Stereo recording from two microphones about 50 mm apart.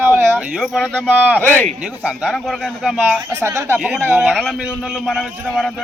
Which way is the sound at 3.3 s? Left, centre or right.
Right.